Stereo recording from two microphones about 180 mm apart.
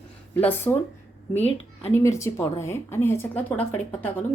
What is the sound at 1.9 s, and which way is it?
A woman's voice, 15° left (ahead or behind).